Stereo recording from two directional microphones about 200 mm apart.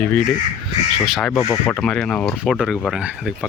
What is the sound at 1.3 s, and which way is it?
Speech, 15° left (ahead or behind).